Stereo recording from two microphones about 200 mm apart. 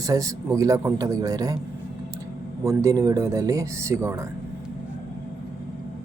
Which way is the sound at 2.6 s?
15° right (ahead or behind).